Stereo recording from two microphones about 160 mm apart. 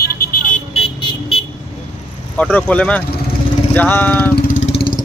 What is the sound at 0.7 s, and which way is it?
Vehicle, 35° left (ahead or behind).